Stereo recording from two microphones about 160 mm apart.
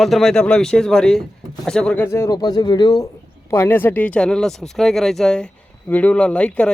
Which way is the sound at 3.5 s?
15° left (ahead or behind).